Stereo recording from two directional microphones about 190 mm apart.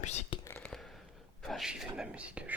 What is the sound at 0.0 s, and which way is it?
Speech, 35° left (ahead or behind).